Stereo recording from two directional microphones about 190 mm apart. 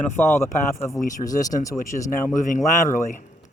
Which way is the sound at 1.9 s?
15° left (ahead or behind).